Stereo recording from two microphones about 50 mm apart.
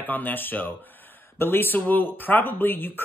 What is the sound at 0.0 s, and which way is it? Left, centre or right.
Speech, left.